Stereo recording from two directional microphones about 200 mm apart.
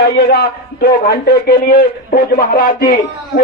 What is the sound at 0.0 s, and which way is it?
A man's voice, 50° left (ahead or behind).